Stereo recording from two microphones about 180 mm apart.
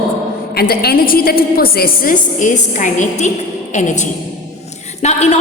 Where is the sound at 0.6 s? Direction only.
60° left (ahead or behind).